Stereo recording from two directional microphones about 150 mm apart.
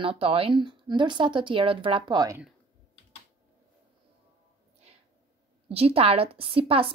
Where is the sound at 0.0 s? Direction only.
40° right (ahead or behind).